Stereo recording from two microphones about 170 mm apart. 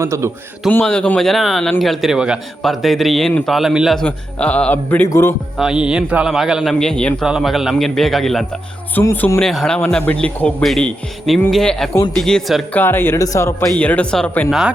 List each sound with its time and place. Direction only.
0.0 s speech: 15° right (ahead or behind)
0.7 s a man's voice: 10° left (ahead or behind)
5.5 s a man's voice: 5° right (ahead or behind)
9.0 s speech: 15° left (ahead or behind)
9.4 s a man's voice: centre (ahead or behind)
12.8 s speech: 15° left (ahead or behind)
13.7 s speech: 10° left (ahead or behind)